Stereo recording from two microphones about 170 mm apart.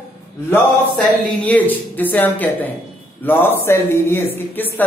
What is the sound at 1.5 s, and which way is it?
A woman's voice, 10° left (ahead or behind).